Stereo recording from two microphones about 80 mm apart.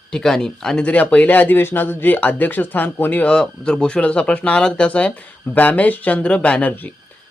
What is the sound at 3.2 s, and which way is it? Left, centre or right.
Speech, centre.